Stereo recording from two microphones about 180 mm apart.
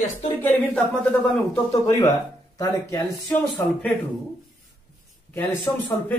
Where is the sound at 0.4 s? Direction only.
10° left (ahead or behind).